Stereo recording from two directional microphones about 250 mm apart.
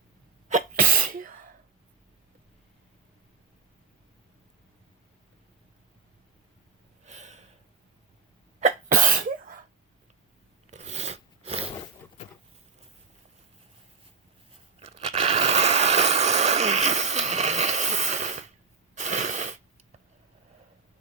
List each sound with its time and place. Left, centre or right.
0.4 s sneeze: right
7.0 s snort: right
8.6 s sneeze: right
10.7 s filing: right
14.8 s a sound: right